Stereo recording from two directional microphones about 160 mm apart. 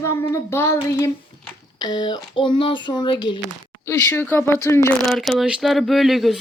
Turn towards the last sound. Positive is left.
turn(degrees=0)  # may be behind; listen again after turning